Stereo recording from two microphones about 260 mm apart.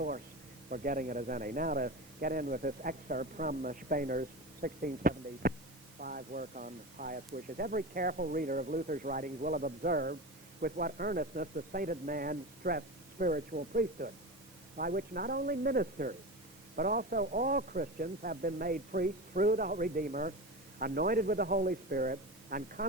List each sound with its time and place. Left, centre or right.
0.7 s a man's voice: right